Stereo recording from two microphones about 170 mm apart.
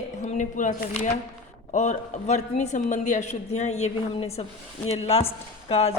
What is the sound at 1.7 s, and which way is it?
A woman's voice, 45° left (ahead or behind).